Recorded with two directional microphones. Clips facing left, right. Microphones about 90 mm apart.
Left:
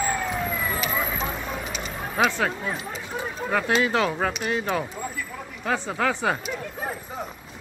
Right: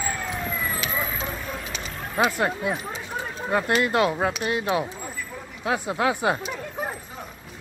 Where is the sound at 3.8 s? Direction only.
5° right (ahead or behind).